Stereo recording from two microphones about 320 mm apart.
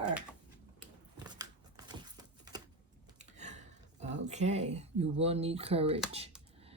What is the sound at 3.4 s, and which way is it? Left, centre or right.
Speech, right.